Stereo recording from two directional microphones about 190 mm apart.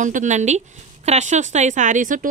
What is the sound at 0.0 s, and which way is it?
A woman's voice, 40° right (ahead or behind).